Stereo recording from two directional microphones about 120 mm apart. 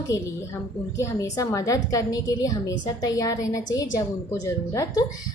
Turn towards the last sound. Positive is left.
turn(degrees=25)  # may be behind; listen again after turning